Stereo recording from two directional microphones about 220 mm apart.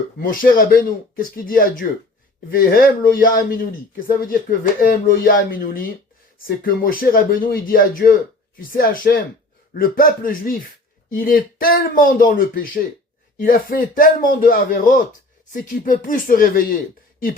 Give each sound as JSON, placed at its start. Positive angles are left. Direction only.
{"t": 0.2, "sound": "speech", "side_deg": 40}